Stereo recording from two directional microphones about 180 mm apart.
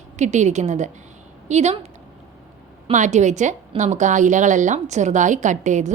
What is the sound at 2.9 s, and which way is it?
A woman's voice, 40° right (ahead or behind).